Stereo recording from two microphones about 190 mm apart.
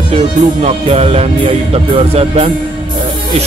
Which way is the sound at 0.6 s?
35° right (ahead or behind).